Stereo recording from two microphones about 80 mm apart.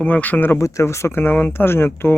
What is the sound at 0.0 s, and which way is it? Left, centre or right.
Speech, left.